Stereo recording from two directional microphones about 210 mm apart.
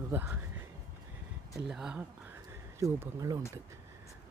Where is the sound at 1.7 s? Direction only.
5° right (ahead or behind).